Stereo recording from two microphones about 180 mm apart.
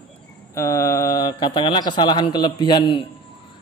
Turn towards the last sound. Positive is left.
turn(degrees=25)  # may be behind; listen again after turning